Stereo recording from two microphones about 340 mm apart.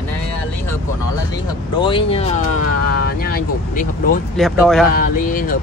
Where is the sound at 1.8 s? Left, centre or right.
Centre.